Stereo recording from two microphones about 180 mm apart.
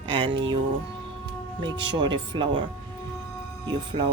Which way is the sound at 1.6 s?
25° right (ahead or behind).